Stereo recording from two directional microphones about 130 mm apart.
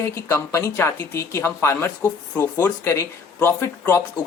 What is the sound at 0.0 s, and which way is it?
Speech, 20° left (ahead or behind).